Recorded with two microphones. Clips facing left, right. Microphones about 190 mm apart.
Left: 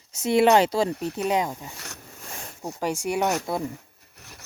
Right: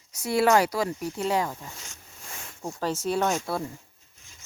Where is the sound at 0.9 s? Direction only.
65° left (ahead or behind).